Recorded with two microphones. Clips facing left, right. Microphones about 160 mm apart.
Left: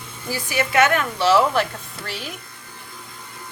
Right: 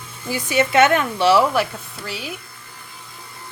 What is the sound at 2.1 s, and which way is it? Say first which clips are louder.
Speech: right 2 dB; centre (ahead or behind).